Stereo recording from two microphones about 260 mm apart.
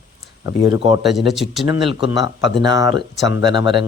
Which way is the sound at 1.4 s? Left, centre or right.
Centre.